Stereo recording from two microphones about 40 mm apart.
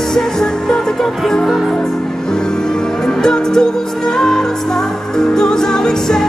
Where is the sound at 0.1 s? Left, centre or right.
Centre.